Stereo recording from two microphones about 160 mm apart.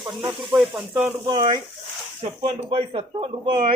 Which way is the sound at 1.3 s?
30° right (ahead or behind).